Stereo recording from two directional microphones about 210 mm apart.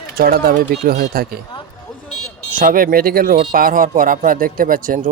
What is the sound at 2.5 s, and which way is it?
Speech, 40° right (ahead or behind).